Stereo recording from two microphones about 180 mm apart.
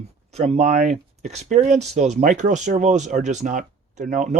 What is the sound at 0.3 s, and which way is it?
Speech, 35° right (ahead or behind).